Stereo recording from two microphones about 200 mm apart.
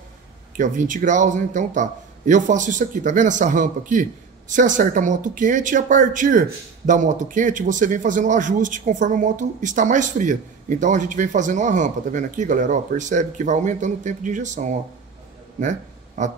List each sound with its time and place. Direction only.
0.6 s a man's voice: 40° right (ahead or behind)